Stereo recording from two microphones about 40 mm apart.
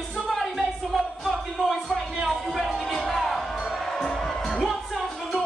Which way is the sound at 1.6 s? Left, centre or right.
Centre.